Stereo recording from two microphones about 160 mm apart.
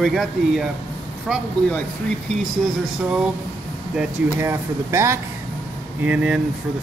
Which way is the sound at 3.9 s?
15° right (ahead or behind).